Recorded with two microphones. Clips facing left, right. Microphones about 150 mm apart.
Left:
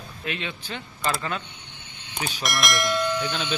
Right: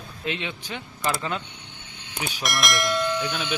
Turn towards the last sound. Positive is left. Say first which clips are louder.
# even
turn(degrees=-5)  # may be behind; listen again after turning